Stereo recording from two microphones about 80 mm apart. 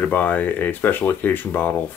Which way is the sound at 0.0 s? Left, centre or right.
Left.